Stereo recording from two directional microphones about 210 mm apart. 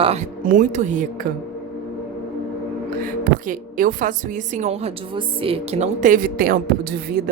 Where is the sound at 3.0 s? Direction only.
40° right (ahead or behind).